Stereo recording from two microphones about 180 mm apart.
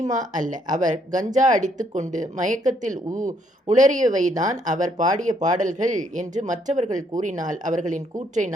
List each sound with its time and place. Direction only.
0.1 s speech: 45° right (ahead or behind)
3.1 s speech: 20° right (ahead or behind)
3.7 s speech: 45° right (ahead or behind)